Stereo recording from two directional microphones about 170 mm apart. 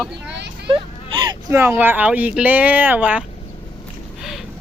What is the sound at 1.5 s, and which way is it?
Speech, 15° right (ahead or behind).